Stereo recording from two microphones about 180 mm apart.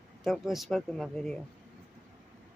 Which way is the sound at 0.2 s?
Centre (ahead or behind).